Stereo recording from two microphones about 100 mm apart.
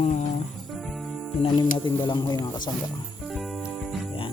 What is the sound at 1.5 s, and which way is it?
Speech, 50° left (ahead or behind).